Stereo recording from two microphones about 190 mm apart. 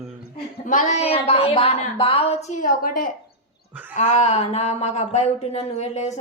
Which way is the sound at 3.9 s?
35° left (ahead or behind).